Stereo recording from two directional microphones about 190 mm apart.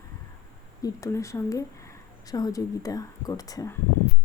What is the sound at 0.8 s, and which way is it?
A woman's voice, 15° left (ahead or behind).